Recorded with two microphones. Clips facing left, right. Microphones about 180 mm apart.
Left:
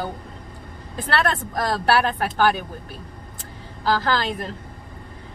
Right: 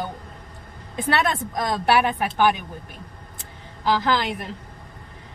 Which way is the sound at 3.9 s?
15° right (ahead or behind).